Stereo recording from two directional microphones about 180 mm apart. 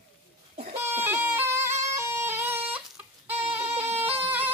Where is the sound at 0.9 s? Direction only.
10° right (ahead or behind).